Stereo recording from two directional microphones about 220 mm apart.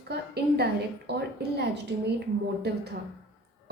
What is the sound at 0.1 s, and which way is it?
A woman's voice, 50° right (ahead or behind).